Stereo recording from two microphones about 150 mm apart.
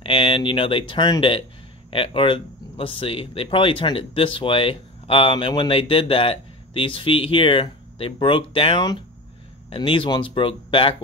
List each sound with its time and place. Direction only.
0.0 s speech: 35° left (ahead or behind)